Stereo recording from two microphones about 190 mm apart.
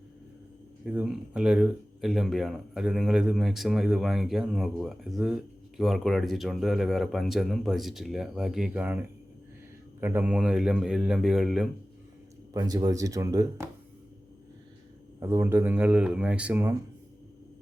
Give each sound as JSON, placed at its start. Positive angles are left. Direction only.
{"t": 0.9, "sound": "speech", "side_deg": -5}
{"t": 12.5, "sound": "speech", "side_deg": -20}
{"t": 15.2, "sound": "speech", "side_deg": -15}